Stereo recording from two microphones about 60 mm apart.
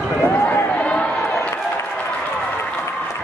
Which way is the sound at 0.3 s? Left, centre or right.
Left.